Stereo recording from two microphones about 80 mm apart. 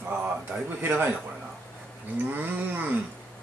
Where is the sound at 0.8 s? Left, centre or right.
Right.